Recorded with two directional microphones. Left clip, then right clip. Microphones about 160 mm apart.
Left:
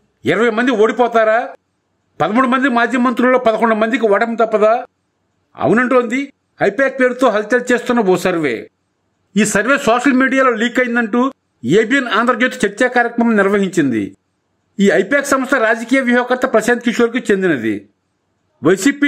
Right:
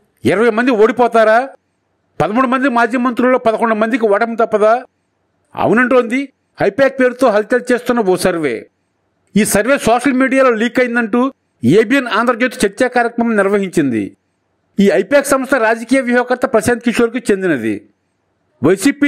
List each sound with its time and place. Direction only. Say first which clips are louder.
0.2 s a man's voice: right 2 dB; 30° right (ahead or behind)